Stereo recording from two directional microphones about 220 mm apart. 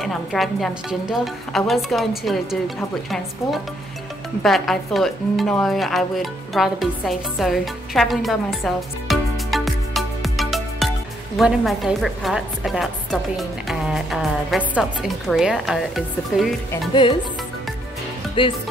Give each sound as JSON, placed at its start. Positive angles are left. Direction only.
{"t": 0.0, "sound": "a woman's voice", "side_deg": 0}
{"t": 4.4, "sound": "a woman's voice", "side_deg": 0}
{"t": 18.4, "sound": "music", "side_deg": 25}